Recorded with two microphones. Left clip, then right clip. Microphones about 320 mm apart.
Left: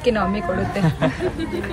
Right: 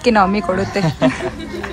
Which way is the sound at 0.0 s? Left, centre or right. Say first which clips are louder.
Right 6 dB; centre.